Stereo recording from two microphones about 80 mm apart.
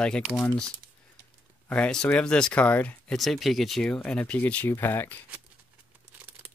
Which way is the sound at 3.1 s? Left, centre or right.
Centre.